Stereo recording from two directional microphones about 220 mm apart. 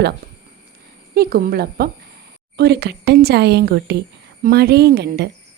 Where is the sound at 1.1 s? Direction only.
45° right (ahead or behind).